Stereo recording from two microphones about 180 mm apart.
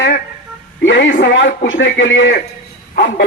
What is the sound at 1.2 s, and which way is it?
A man's voice, 85° left.